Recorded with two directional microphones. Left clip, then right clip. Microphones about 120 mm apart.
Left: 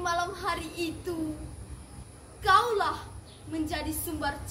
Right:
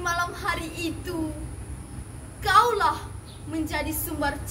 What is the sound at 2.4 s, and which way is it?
A woman's voice, 15° left (ahead or behind).